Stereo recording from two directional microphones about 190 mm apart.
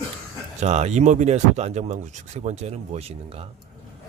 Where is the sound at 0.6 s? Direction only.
35° right (ahead or behind).